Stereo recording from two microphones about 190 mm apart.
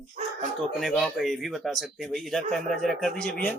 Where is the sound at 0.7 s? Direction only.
Centre (ahead or behind).